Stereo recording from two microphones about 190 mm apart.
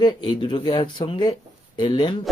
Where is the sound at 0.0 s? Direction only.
25° left (ahead or behind).